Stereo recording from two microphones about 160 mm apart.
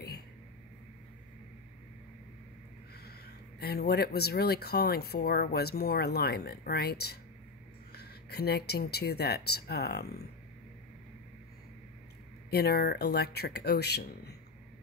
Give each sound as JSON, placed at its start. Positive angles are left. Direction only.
{"t": 3.1, "sound": "speech", "side_deg": 80}
{"t": 12.4, "sound": "speech", "side_deg": 80}